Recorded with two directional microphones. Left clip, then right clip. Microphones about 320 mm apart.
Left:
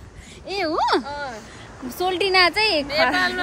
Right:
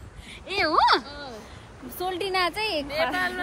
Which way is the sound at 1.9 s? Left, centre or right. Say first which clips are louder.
Left 8 dB; left.